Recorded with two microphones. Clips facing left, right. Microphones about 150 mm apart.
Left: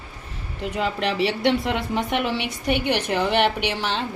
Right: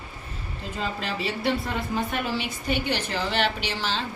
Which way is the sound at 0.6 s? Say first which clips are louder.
Left 7 dB; 70° left (ahead or behind).